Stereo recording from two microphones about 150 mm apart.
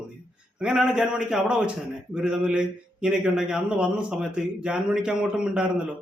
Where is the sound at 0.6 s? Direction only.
5° right (ahead or behind).